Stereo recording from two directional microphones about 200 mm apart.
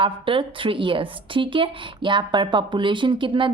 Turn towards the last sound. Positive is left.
turn(degrees=-25)  # may be behind; listen again after turning